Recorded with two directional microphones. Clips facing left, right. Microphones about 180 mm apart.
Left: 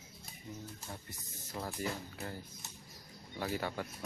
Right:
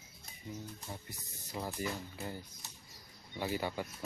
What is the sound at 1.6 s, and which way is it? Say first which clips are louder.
Speech: right 1 dB; 5° right (ahead or behind).